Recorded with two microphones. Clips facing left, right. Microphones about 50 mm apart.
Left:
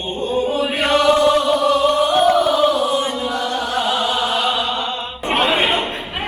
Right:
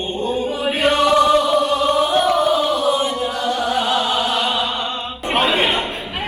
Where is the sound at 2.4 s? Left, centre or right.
Left.